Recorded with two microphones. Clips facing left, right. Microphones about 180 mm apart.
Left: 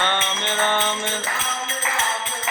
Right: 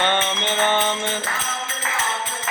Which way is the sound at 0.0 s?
15° right (ahead or behind).